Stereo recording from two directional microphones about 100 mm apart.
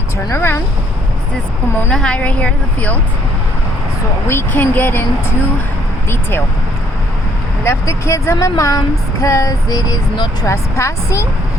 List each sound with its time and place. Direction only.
0.3 s speech: 30° left (ahead or behind)
1.9 s speech: 10° left (ahead or behind)
4.3 s speech: 20° left (ahead or behind)
7.6 s speech: 30° left (ahead or behind)
10.5 s speech: 30° left (ahead or behind)